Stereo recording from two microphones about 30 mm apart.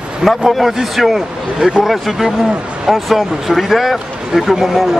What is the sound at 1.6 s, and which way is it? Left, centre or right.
Speech, right.